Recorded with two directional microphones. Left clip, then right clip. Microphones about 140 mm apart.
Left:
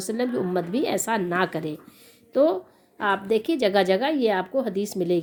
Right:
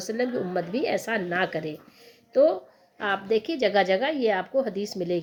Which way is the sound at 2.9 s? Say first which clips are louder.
Left 2 dB; 35° left (ahead or behind).